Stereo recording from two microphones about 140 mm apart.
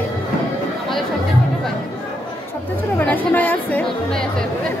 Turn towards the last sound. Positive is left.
turn(degrees=10)  # may be behind; listen again after turning